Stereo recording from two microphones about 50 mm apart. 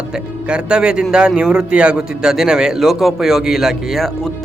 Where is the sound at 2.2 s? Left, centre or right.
Centre.